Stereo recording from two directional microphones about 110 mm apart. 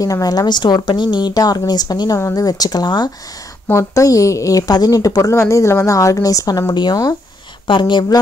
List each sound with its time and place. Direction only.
0.0 s speech: 35° left (ahead or behind)
3.6 s speech: 25° left (ahead or behind); by 8.2 s 45° left (ahead or behind)